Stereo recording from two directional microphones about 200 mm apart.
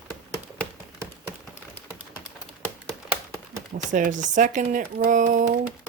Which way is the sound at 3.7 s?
40° right (ahead or behind).